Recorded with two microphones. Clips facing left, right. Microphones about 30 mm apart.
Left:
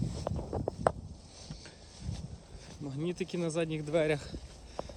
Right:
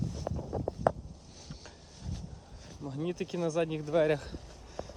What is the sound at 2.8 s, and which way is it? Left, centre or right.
Speech, centre.